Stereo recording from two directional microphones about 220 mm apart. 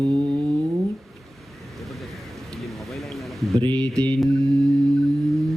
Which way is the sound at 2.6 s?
Centre (ahead or behind).